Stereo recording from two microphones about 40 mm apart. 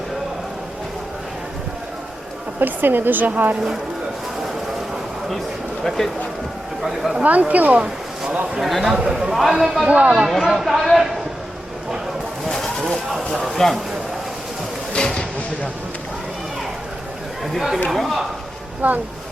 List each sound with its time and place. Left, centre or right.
2.6 s a woman's voice: right
6.8 s a man's voice: centre
7.2 s speech: right
8.7 s speech: centre
9.0 s a man's voice: centre
9.3 s a man's voice: centre
9.8 s speech: right
10.4 s speech: centre
13.5 s a man's voice: centre
14.9 s a sound: left
17.4 s speech: centre
18.8 s a woman's voice: right